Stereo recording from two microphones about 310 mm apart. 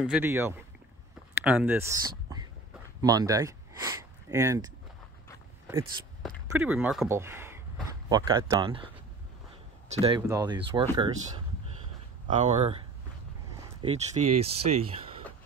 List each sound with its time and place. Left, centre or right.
0.0 s speech: centre
6.4 s speech: centre
10.0 s speech: centre
12.3 s speech: right
13.8 s speech: right